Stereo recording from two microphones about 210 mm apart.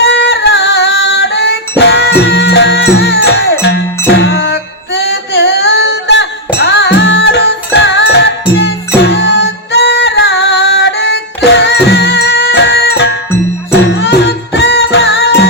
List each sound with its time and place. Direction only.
0.0 s music: 55° left (ahead or behind)